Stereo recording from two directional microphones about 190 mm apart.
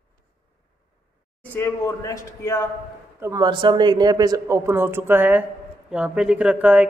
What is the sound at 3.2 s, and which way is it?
Speech, 20° right (ahead or behind).